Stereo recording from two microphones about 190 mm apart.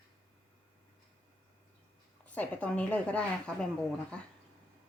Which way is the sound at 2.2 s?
5° left (ahead or behind).